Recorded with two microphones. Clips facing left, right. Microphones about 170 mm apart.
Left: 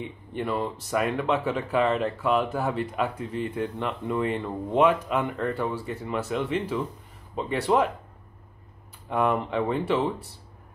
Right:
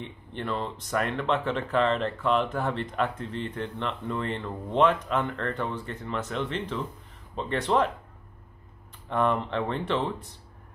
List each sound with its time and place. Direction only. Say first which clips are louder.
0.0 s speech: left 4 dB; 10° left (ahead or behind)
9.1 s speech: left 1 dB; 5° left (ahead or behind)